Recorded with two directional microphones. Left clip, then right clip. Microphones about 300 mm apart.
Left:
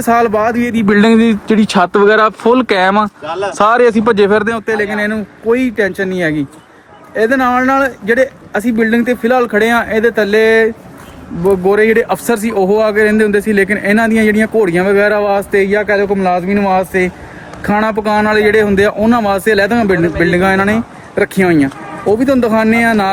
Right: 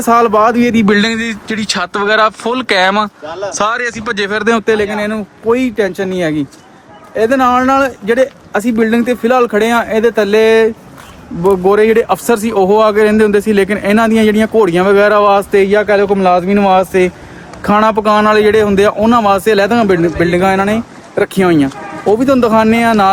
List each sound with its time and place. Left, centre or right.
0.0 s a man's voice: centre
0.9 s speech: centre
3.2 s speech: left
3.5 s speech: centre
3.8 s speech: centre
4.4 s speech: right
4.9 s a man's voice: centre